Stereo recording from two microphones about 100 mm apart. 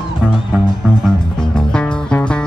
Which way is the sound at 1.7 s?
10° left (ahead or behind).